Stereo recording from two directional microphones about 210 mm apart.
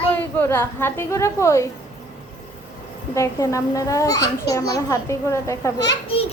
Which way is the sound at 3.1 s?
15° left (ahead or behind).